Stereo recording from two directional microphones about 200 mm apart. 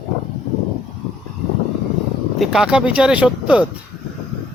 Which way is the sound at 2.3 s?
Centre (ahead or behind).